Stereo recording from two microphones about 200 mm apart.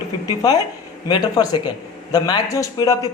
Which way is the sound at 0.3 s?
20° left (ahead or behind).